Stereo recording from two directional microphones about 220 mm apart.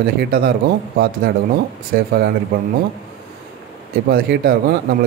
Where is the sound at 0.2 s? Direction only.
45° right (ahead or behind).